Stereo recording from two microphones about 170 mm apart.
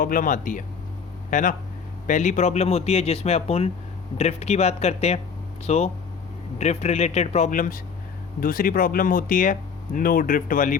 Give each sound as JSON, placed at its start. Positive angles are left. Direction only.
{"t": 0.0, "sound": "speech", "side_deg": 55}